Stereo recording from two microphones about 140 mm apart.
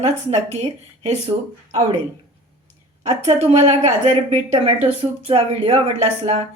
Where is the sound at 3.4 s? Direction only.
55° right (ahead or behind).